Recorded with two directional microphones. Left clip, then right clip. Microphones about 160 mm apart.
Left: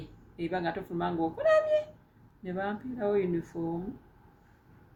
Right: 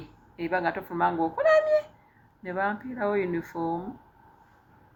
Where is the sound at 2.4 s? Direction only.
10° left (ahead or behind).